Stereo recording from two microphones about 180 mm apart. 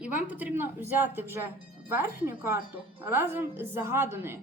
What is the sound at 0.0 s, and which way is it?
A woman's voice, 10° right (ahead or behind).